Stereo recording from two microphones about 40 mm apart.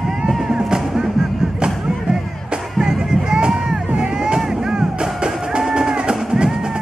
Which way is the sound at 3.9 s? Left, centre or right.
Right.